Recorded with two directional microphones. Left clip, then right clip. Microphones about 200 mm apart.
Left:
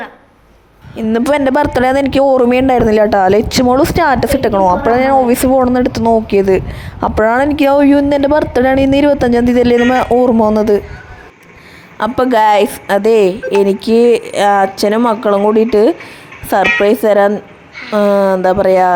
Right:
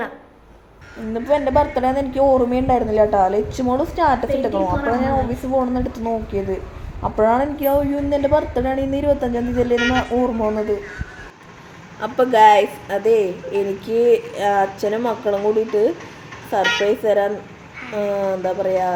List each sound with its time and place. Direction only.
1.1 s speech: 55° left (ahead or behind)
11.9 s speech: 50° left (ahead or behind)